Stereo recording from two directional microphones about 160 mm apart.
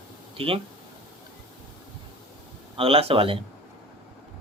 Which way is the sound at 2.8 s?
35° right (ahead or behind).